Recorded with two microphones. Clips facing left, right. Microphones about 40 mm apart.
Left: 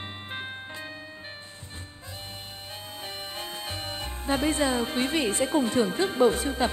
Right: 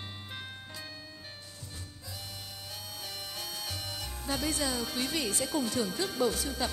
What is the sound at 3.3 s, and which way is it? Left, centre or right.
Speech, left.